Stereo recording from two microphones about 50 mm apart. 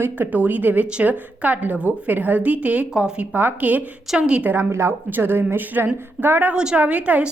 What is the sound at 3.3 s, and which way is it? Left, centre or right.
Speech, right.